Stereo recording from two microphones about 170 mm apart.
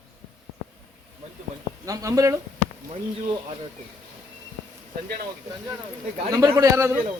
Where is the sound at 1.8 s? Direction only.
20° right (ahead or behind).